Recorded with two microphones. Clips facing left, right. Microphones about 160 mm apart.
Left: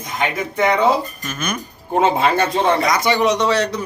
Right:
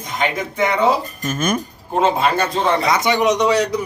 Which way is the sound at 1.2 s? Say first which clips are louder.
Right 5 dB; 45° right (ahead or behind).